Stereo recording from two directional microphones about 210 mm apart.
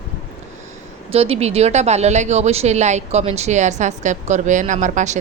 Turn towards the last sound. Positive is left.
turn(degrees=-35)  # may be behind; listen again after turning